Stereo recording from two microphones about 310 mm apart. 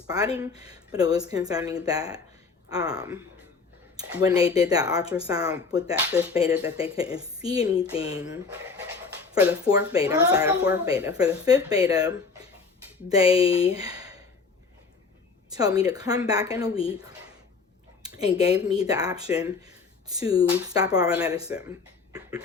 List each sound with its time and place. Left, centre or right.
0.3 s speech: centre
13.7 s a sound: centre
15.5 s speech: centre
16.7 s speech: centre
18.0 s speech: centre